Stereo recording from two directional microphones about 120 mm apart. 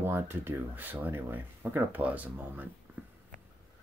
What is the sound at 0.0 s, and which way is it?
Speech, 20° right (ahead or behind).